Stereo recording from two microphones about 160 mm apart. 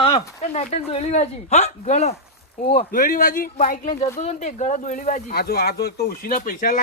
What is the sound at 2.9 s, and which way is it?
Speech, 60° left (ahead or behind).